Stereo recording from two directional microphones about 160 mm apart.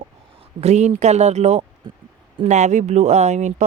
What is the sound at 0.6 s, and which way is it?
Speech, 45° right (ahead or behind).